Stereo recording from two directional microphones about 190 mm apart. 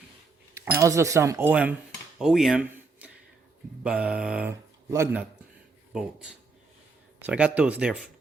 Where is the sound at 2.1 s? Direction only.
Centre (ahead or behind).